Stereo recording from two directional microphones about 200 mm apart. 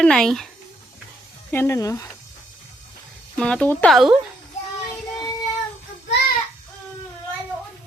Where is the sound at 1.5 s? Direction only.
15° left (ahead or behind).